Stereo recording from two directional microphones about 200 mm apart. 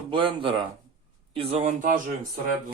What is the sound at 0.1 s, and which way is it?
Speech, 25° right (ahead or behind).